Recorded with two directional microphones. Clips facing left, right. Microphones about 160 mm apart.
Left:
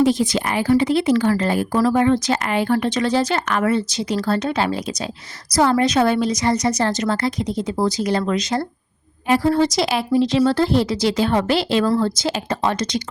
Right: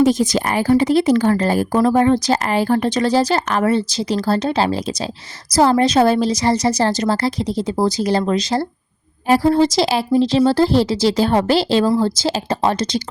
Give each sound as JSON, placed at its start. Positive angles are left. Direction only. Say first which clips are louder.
{"t": 0.0, "sound": "speech", "louder": "right 2 dB", "side_deg": -45}